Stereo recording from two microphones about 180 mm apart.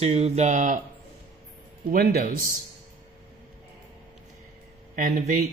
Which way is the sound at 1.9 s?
55° right (ahead or behind).